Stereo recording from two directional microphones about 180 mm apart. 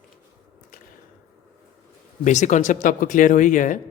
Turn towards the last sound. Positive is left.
turn(degrees=45)  # may be behind; listen again after turning